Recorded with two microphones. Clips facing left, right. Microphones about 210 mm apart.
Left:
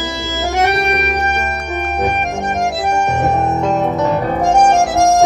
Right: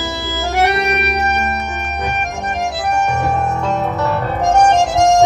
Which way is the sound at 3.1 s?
20° left (ahead or behind).